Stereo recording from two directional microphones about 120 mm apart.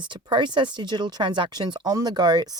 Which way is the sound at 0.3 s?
40° right (ahead or behind).